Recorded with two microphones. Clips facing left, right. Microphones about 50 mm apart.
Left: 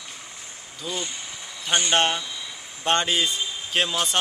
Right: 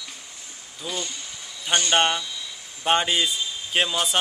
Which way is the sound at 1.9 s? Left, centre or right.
Centre.